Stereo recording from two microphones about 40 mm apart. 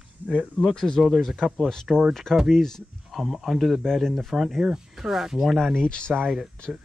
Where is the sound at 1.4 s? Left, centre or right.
Centre.